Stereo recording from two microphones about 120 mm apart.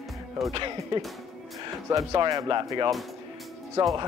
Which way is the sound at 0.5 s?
40° right (ahead or behind).